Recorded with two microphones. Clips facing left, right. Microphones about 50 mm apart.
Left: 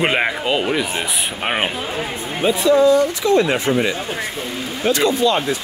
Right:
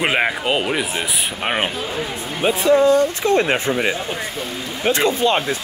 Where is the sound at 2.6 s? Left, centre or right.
Right.